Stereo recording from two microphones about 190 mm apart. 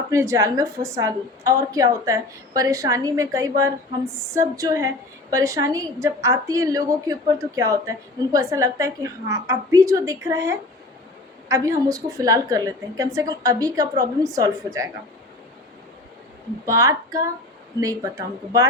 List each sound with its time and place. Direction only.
0.1 s a woman's voice: 15° right (ahead or behind)
16.6 s a woman's voice: 15° right (ahead or behind)